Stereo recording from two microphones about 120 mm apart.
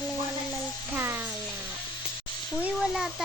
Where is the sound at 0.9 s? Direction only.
20° right (ahead or behind).